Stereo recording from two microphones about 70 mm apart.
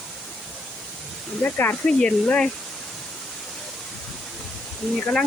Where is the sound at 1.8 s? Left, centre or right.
Centre.